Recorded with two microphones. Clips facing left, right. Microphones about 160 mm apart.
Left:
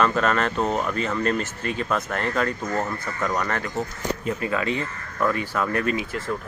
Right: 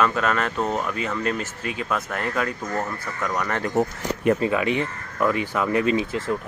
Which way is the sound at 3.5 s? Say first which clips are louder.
Right 5 dB; 20° right (ahead or behind).